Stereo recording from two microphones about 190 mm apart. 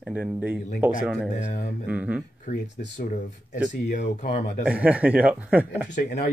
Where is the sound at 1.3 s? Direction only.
40° left (ahead or behind).